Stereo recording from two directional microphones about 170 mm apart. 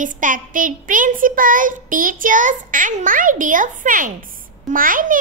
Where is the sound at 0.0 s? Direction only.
50° right (ahead or behind).